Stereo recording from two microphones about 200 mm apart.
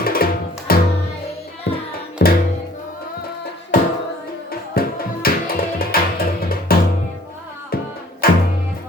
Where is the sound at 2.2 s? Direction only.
55° left (ahead or behind).